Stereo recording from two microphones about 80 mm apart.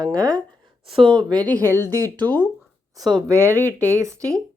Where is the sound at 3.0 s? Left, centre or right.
Right.